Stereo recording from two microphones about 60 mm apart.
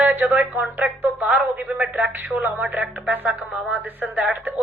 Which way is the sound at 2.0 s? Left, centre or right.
Right.